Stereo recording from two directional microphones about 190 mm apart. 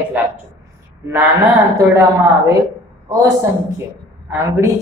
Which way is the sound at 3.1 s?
15° right (ahead or behind).